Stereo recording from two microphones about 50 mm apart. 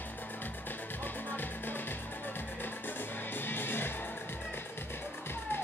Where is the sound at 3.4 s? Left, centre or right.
Left.